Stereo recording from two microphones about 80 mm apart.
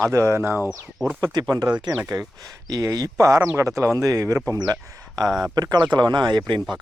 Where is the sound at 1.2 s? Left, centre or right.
Right.